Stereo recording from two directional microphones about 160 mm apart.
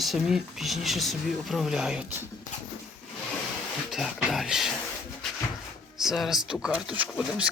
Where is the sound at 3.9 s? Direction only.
Centre (ahead or behind).